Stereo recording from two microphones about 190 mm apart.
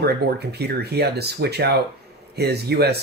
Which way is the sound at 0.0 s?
55° right (ahead or behind).